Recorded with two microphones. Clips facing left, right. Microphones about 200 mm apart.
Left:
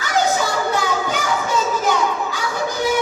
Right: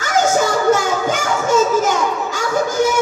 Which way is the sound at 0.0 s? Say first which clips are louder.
Right 3 dB; 45° right (ahead or behind).